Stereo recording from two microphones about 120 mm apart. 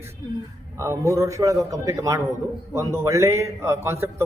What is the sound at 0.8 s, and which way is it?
A man's voice, 25° right (ahead or behind).